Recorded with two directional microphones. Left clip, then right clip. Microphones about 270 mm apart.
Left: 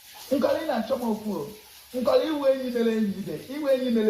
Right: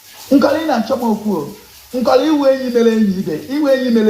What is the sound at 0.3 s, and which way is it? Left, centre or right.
Speech, right.